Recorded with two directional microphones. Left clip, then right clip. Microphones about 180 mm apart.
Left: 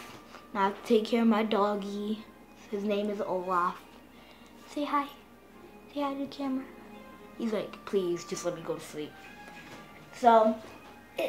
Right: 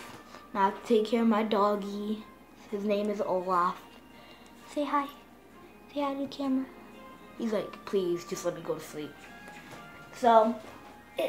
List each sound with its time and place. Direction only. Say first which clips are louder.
0.0 s a woman's voice: right 1 dB; centre (ahead or behind)
4.7 s speech: right 1 dB; 5° right (ahead or behind)
10.1 s speech: even; centre (ahead or behind)